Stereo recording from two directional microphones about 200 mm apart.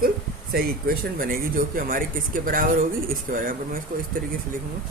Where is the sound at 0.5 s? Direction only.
45° right (ahead or behind).